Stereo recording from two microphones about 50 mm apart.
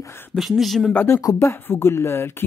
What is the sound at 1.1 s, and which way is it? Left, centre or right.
Speech, left.